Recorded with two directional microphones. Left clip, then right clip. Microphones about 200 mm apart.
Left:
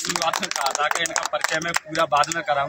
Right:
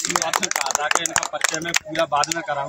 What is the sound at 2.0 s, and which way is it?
Speech, 5° left (ahead or behind).